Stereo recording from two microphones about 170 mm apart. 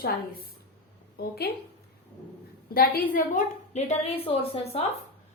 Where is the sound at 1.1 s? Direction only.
65° left (ahead or behind).